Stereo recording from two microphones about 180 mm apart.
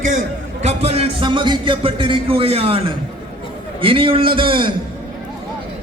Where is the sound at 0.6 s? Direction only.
35° right (ahead or behind).